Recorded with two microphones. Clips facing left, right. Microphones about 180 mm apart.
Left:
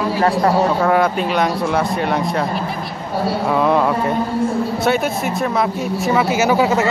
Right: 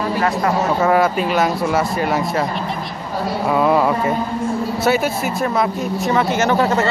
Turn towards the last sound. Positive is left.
turn(degrees=5)  # may be behind; listen again after turning